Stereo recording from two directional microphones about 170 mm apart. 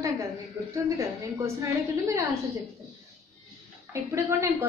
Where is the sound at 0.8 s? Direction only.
15° right (ahead or behind).